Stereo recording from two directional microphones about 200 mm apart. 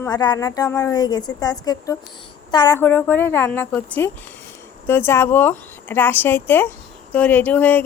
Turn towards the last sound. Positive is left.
turn(degrees=10)  # may be behind; listen again after turning